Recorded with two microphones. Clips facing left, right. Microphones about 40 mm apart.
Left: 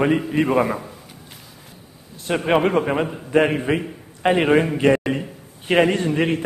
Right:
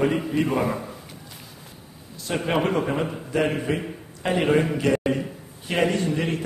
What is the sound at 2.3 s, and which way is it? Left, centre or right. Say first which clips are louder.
A man's voice: left 5 dB; left.